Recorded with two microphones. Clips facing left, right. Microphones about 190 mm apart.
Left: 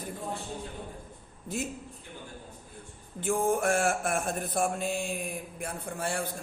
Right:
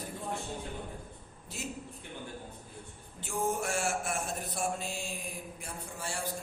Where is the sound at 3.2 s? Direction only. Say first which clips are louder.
Left 6 dB; 55° left (ahead or behind).